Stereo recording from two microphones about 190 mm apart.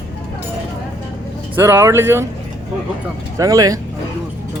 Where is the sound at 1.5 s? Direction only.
10° right (ahead or behind).